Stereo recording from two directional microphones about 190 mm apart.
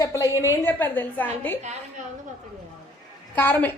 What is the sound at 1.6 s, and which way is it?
Speech, 35° right (ahead or behind).